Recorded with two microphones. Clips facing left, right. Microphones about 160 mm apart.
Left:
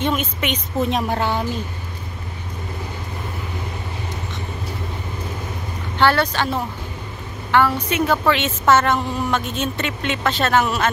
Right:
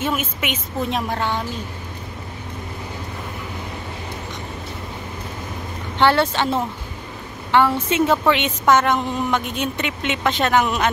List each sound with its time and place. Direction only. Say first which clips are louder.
0.0 s a woman's voice: left 2 dB; 10° right (ahead or behind)
5.9 s a woman's voice: right 1 dB; 25° right (ahead or behind)